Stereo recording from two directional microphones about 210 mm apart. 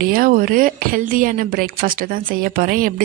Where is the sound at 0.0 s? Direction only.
45° right (ahead or behind).